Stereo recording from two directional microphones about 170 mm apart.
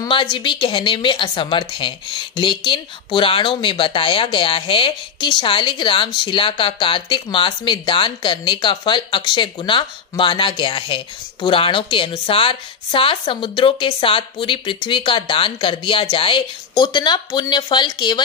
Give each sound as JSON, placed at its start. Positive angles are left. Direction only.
{"t": 0.0, "sound": "a woman's voice", "side_deg": 30}